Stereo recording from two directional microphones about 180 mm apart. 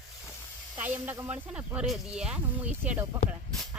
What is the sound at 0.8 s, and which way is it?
Speech, 10° right (ahead or behind).